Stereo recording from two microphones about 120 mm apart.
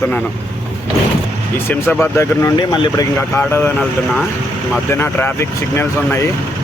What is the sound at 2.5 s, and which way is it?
Speech, 40° left (ahead or behind).